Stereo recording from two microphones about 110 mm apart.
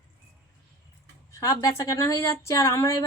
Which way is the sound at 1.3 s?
30° left (ahead or behind).